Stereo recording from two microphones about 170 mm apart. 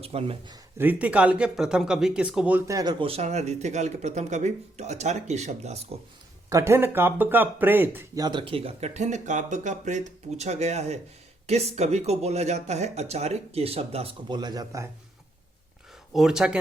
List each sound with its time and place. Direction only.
0.0 s speech: 35° right (ahead or behind)
0.8 s speech: 10° right (ahead or behind)
3.0 s speech: 40° right (ahead or behind)
6.5 s speech: 15° right (ahead or behind)
8.2 s speech: 25° right (ahead or behind)
16.1 s speech: centre (ahead or behind)